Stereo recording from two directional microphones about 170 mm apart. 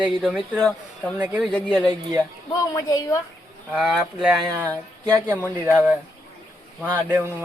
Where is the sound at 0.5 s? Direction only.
5° left (ahead or behind).